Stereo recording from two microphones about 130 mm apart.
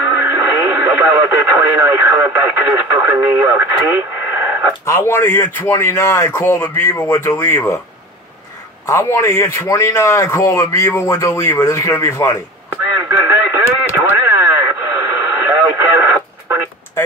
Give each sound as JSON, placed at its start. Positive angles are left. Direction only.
{"t": 0.2, "sound": "speech", "side_deg": -20}
{"t": 4.8, "sound": "a man's voice", "side_deg": 20}
{"t": 8.8, "sound": "a man's voice", "side_deg": 20}
{"t": 13.3, "sound": "radio", "side_deg": -20}